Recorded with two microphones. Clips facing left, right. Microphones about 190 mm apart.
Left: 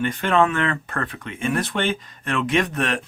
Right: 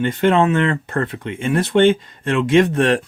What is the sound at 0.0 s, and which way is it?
Speech, 25° right (ahead or behind).